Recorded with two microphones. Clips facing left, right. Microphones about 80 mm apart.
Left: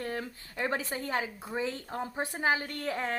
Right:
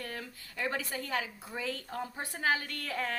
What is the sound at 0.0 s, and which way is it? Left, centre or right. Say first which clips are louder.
A woman's voice: left 6 dB; left.